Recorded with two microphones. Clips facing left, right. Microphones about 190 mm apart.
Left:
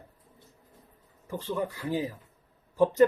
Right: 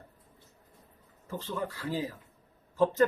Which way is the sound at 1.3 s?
15° left (ahead or behind).